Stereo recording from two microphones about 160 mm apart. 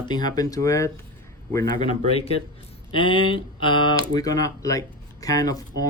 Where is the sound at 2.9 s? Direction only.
30° left (ahead or behind).